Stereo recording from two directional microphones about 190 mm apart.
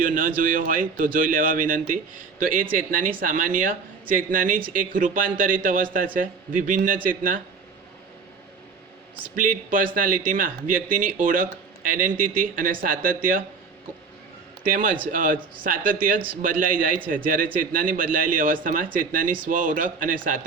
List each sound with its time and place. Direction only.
0.0 s a man's voice: 45° right (ahead or behind)
9.2 s a man's voice: 45° right (ahead or behind)
14.6 s a man's voice: 45° right (ahead or behind)